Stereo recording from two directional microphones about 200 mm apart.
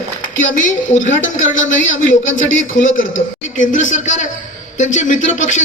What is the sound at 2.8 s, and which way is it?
A man's voice, 45° left (ahead or behind).